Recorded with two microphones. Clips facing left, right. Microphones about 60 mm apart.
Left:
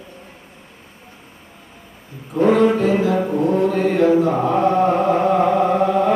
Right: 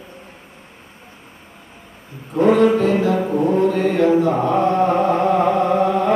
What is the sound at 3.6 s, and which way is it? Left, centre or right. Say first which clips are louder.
Mantra: left 1 dB; centre.